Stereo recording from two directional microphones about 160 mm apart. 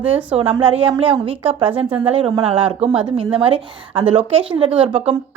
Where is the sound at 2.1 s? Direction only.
35° right (ahead or behind).